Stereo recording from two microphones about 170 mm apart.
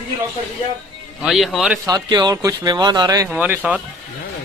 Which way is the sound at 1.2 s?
Centre (ahead or behind).